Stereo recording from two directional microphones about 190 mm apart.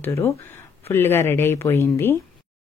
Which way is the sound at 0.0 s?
15° left (ahead or behind).